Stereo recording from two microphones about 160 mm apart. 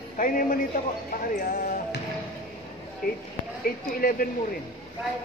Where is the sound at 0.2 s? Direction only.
60° left (ahead or behind).